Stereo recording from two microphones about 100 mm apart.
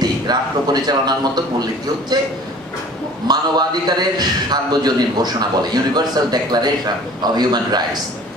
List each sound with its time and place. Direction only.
0.0 s a man's voice: 45° right (ahead or behind)
3.3 s a man's voice: 45° right (ahead or behind)